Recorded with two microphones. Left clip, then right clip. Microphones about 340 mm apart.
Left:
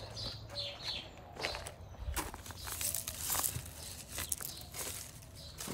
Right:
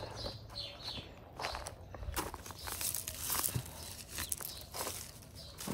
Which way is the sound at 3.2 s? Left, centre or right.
Centre.